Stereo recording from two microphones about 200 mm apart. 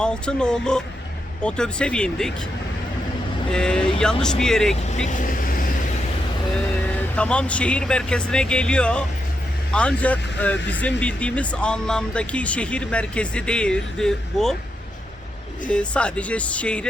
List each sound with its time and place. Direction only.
0.0 s speech: 5° left (ahead or behind)
3.5 s speech: 5° left (ahead or behind)
5.0 s vehicle: 40° left (ahead or behind)
7.2 s speech: 5° left (ahead or behind)
15.7 s speech: 5° left (ahead or behind)